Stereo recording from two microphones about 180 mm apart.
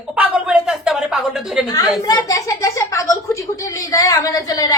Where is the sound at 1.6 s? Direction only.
20° left (ahead or behind).